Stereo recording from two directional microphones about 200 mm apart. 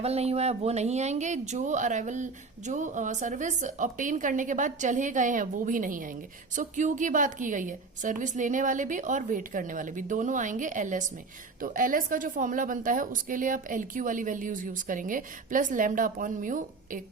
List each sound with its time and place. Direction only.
0.0 s speech: 30° right (ahead or behind)